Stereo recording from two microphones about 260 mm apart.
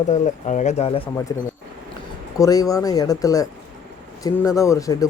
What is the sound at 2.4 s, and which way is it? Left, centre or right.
Speech, centre.